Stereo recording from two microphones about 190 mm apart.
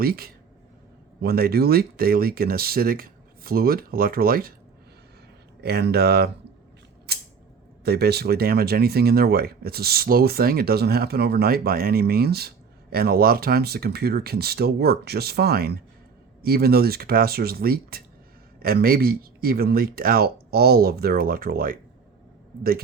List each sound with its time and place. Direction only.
0.0 s speech: 50° right (ahead or behind)
5.6 s speech: 55° right (ahead or behind)
7.1 s creak: 55° right (ahead or behind)
7.9 s speech: 55° right (ahead or behind)